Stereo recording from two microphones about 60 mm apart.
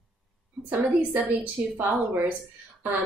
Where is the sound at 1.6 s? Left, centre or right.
Right.